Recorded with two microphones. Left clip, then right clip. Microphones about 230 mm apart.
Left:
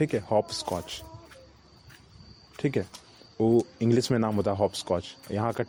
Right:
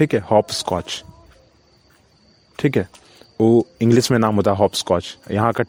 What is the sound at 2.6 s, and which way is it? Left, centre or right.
Speech, right.